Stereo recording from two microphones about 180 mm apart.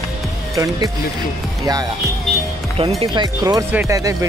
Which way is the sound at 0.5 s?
20° right (ahead or behind).